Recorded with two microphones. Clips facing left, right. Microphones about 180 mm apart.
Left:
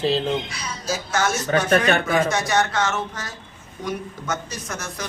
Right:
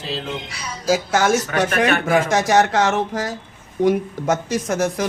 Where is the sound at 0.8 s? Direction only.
90° right.